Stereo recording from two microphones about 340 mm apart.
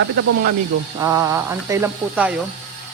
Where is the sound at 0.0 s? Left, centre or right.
Right.